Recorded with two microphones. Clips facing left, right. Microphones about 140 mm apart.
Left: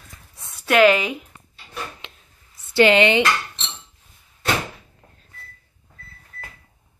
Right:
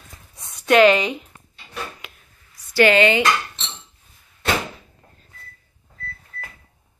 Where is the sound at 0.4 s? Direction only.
5° left (ahead or behind).